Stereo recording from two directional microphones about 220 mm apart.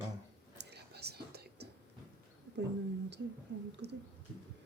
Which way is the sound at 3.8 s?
50° right (ahead or behind).